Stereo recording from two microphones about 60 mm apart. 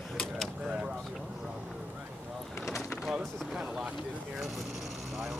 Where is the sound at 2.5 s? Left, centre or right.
Left.